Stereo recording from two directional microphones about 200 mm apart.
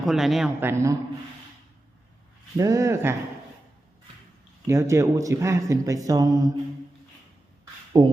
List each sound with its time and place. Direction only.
0.0 s speech: centre (ahead or behind)
2.6 s speech: 15° right (ahead or behind)
4.6 s speech: 15° right (ahead or behind)
7.9 s a sound: 20° right (ahead or behind)